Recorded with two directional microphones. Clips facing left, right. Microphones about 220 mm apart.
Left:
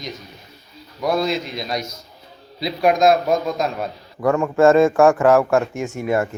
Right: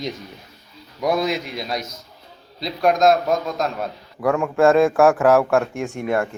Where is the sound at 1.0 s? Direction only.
15° right (ahead or behind).